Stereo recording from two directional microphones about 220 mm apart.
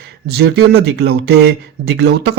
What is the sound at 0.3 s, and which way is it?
Speech, 50° right (ahead or behind).